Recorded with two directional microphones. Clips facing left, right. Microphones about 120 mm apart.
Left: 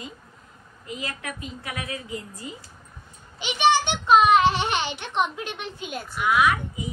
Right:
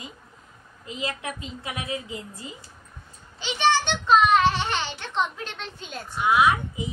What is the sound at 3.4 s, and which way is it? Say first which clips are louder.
A child's voice: left 2 dB; 15° left (ahead or behind).